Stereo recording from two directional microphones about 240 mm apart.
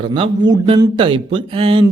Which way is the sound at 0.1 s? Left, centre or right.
Right.